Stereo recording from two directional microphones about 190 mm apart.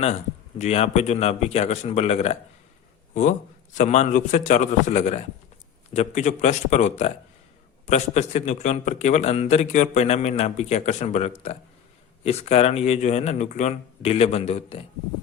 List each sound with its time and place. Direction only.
0.6 s a man's voice: 35° left (ahead or behind)
3.8 s a man's voice: 35° left (ahead or behind)